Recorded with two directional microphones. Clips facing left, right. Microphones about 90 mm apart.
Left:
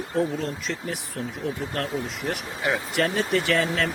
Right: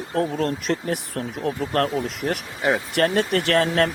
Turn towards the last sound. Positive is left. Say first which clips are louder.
# right 4 dB
turn(degrees=-60)  # may be behind; listen again after turning